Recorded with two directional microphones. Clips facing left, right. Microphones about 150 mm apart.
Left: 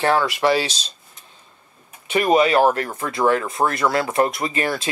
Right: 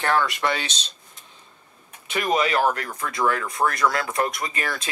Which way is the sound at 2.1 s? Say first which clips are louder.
Left 6 dB; 35° left (ahead or behind).